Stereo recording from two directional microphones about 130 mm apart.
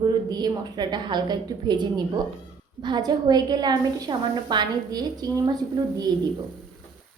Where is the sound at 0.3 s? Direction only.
30° right (ahead or behind).